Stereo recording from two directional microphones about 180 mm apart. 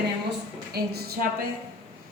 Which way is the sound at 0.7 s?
60° right (ahead or behind).